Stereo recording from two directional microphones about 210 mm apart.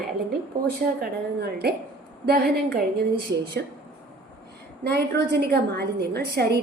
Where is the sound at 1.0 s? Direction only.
50° right (ahead or behind).